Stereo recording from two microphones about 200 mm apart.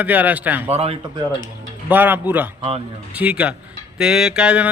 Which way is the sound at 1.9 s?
10° right (ahead or behind).